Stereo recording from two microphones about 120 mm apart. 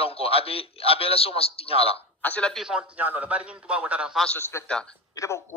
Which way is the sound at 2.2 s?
10° left (ahead or behind).